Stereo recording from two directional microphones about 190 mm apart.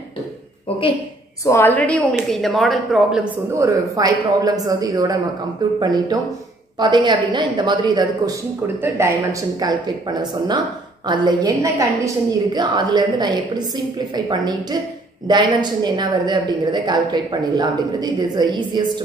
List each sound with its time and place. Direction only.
1.4 s speech: 15° left (ahead or behind); by 3.3 s centre (ahead or behind)
3.5 s a woman's voice: 15° right (ahead or behind)